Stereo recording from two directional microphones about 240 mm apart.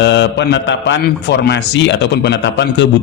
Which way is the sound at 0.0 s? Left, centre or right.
Left.